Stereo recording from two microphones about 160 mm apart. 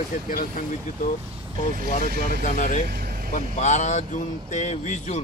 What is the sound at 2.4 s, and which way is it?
Speech, 50° left (ahead or behind).